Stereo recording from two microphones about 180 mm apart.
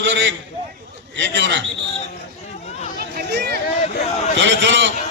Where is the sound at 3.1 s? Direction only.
65° right (ahead or behind).